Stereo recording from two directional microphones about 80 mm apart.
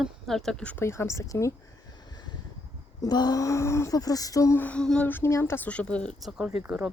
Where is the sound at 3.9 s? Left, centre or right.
Left.